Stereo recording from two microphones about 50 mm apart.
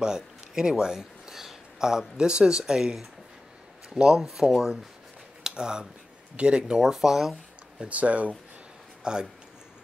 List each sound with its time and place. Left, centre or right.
0.0 s speech: centre
5.4 s a sound: centre
6.3 s speech: centre
6.8 s speech: centre
7.9 s speech: right
9.0 s speech: centre